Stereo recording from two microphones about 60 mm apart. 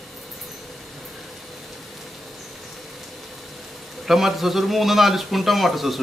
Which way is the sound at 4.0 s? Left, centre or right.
Centre.